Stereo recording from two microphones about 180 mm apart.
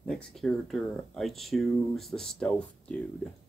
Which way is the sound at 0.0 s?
5° left (ahead or behind).